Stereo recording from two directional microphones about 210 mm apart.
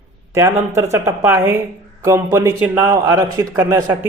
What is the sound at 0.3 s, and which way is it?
Speech, 15° right (ahead or behind).